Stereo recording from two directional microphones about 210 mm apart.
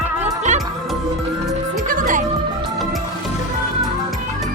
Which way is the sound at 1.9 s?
40° right (ahead or behind).